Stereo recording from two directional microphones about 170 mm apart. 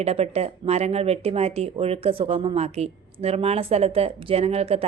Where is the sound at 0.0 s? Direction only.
35° right (ahead or behind).